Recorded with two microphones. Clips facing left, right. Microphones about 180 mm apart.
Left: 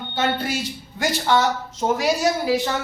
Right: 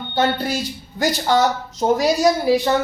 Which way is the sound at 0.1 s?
35° right (ahead or behind).